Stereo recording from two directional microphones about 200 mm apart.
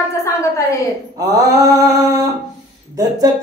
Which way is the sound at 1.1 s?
20° right (ahead or behind).